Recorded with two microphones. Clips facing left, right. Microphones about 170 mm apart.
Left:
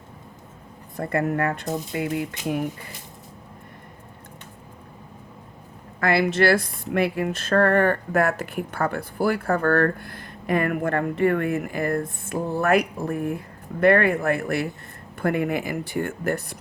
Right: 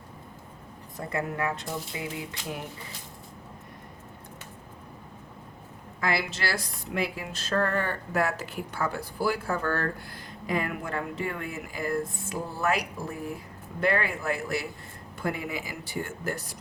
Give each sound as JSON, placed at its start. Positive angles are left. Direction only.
{"t": 0.9, "sound": "speech", "side_deg": 55}
{"t": 6.0, "sound": "speech", "side_deg": 60}